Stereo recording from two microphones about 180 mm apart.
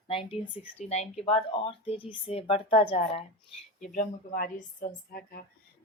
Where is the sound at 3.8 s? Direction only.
45° left (ahead or behind).